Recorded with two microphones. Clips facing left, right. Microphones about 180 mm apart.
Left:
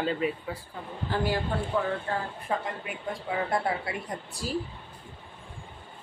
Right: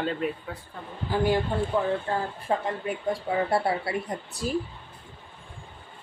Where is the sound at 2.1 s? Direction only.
30° right (ahead or behind).